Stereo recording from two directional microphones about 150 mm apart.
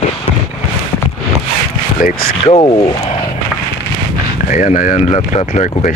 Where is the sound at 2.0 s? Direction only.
80° left.